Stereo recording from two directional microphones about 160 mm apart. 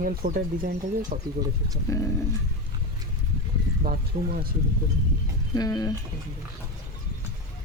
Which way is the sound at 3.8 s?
60° right (ahead or behind).